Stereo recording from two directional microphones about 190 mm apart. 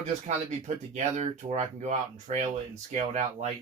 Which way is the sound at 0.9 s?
40° right (ahead or behind).